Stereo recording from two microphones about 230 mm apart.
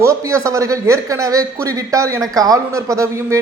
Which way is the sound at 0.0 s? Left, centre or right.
Centre.